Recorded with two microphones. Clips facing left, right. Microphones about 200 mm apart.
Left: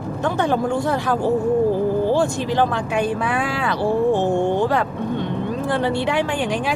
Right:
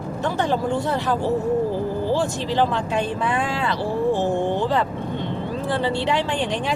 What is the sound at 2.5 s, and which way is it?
Speech, 15° left (ahead or behind).